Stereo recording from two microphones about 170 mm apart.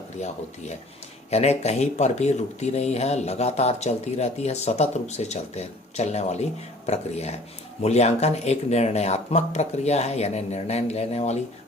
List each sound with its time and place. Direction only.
1.3 s speech: 40° left (ahead or behind)